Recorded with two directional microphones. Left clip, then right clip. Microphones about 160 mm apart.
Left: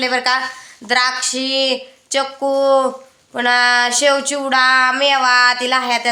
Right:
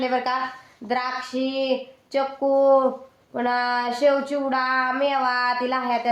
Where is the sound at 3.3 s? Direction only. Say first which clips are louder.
Left 9 dB; 10° left (ahead or behind).